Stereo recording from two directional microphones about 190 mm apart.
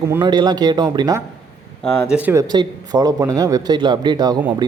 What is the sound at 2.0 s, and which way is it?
A man's voice, 10° right (ahead or behind).